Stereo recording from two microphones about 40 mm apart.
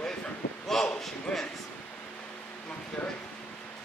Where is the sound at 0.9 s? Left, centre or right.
Centre.